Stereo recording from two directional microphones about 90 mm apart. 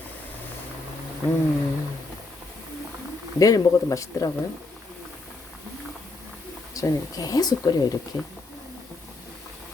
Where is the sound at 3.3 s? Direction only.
40° left (ahead or behind).